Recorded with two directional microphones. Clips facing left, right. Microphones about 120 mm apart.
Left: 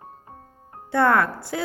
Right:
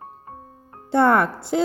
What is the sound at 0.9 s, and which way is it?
Speech, 20° right (ahead or behind).